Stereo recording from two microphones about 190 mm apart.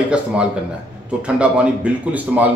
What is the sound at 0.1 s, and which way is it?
A man's voice, 5° right (ahead or behind).